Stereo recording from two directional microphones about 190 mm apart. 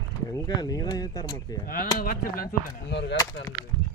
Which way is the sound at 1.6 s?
50° left (ahead or behind).